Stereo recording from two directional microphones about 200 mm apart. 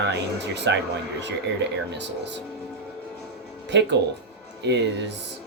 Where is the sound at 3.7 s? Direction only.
60° right (ahead or behind).